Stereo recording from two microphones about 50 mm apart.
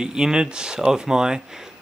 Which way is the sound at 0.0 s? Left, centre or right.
Centre.